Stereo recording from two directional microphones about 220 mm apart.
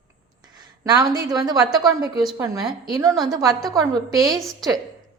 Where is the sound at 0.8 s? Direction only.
20° right (ahead or behind).